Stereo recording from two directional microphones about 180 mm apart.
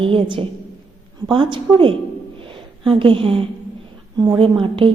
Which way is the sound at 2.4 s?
30° right (ahead or behind).